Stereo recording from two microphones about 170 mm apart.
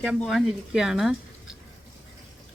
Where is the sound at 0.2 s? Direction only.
Centre (ahead or behind).